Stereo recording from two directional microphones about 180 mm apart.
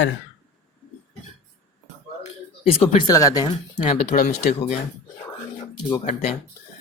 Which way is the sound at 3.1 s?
20° left (ahead or behind).